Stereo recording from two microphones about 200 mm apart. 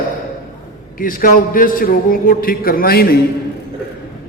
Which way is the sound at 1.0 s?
45° left (ahead or behind).